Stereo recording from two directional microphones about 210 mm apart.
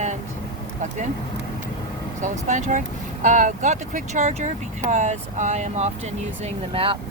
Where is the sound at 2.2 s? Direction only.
35° right (ahead or behind).